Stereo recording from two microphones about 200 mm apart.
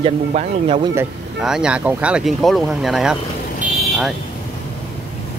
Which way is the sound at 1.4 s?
5° right (ahead or behind).